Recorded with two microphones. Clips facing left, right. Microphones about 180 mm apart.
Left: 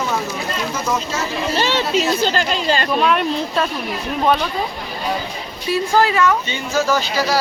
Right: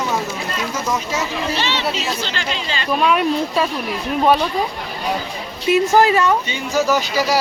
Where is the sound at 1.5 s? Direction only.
45° left (ahead or behind).